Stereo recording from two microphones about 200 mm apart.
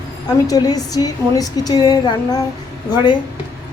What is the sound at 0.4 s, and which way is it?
A woman's voice, 20° left (ahead or behind).